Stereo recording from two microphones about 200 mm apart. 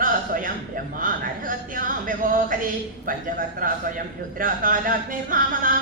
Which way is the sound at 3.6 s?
40° right (ahead or behind).